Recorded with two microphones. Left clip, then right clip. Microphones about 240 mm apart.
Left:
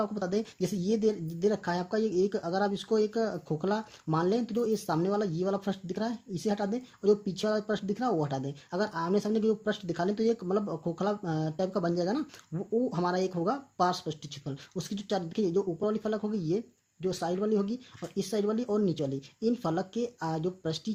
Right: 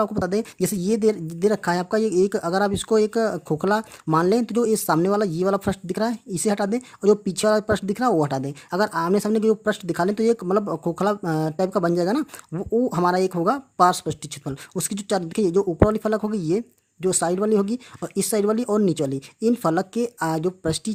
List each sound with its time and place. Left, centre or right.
0.0 s speech: right